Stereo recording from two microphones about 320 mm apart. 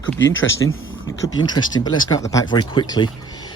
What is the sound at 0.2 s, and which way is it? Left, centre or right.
Speech, left.